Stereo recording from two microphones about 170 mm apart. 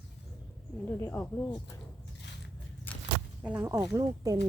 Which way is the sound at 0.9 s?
15° left (ahead or behind).